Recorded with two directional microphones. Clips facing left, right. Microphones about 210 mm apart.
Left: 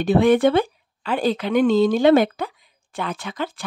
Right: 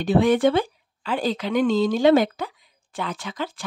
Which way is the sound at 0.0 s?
60° left (ahead or behind).